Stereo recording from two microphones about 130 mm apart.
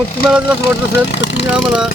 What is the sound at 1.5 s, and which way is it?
Speech, 5° right (ahead or behind).